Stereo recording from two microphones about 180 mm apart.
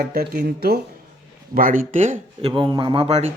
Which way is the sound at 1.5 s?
50° right (ahead or behind).